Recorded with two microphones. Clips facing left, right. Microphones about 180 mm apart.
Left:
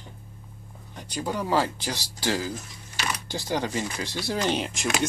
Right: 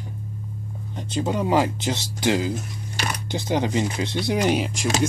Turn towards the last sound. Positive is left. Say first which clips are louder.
# right 5 dB
turn(degrees=0)  # may be behind; listen again after turning